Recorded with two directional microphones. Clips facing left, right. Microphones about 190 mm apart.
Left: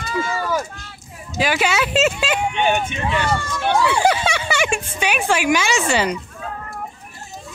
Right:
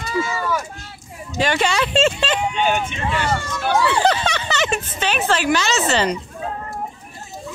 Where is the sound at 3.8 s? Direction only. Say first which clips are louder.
Even; 10° left (ahead or behind).